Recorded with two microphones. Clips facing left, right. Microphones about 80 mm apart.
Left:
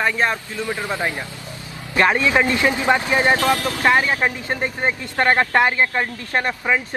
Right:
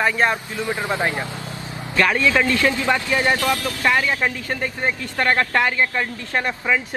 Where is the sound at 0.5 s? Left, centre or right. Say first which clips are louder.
Right 1 dB; right.